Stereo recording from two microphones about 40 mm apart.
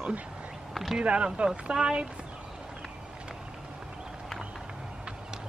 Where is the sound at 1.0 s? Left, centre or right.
Right.